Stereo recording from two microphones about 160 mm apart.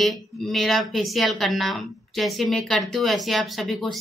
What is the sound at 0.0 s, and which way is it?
Speech, centre (ahead or behind).